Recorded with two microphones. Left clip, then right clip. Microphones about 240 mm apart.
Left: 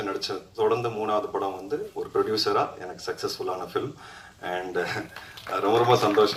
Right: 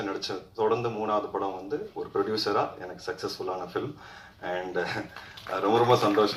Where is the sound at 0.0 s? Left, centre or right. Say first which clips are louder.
Left 2 dB; left.